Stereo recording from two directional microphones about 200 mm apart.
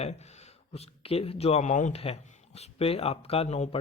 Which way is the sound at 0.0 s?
35° left (ahead or behind).